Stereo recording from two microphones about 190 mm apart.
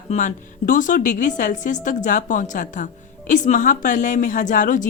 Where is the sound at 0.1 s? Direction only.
45° left (ahead or behind).